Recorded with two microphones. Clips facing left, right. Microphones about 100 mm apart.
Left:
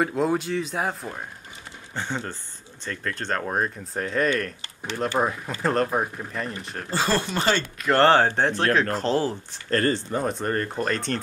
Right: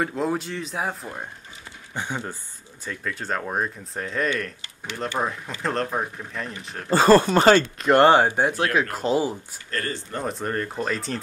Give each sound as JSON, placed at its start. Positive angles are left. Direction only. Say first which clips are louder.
{"t": 0.0, "sound": "speech", "louder": "left 2 dB", "side_deg": 0}
{"t": 2.0, "sound": "speech", "louder": "even", "side_deg": -10}
{"t": 7.0, "sound": "speech", "louder": "right 9 dB", "side_deg": -45}
{"t": 7.6, "sound": "speech", "louder": "right 2 dB", "side_deg": -20}
{"t": 9.7, "sound": "speech", "louder": "left 7 dB", "side_deg": 45}
{"t": 10.1, "sound": "speech", "louder": "left 2 dB", "side_deg": 0}